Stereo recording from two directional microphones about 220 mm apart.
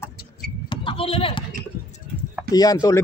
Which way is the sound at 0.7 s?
25° left (ahead or behind).